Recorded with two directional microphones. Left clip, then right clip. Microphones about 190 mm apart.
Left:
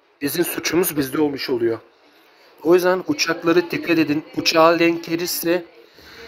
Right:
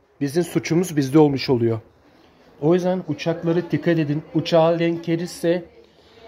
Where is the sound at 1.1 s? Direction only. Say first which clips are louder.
Right 6 dB; 5° right (ahead or behind).